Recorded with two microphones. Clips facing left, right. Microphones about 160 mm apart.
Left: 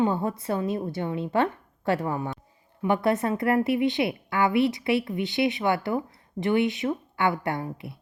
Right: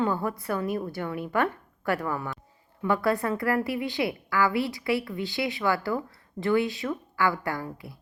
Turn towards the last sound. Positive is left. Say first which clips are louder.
# left 2 dB
turn(degrees=25)  # may be behind; listen again after turning